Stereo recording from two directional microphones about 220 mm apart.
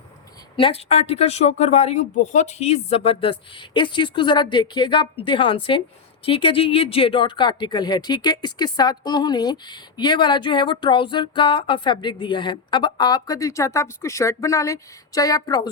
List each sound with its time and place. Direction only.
0.5 s speech: 25° left (ahead or behind)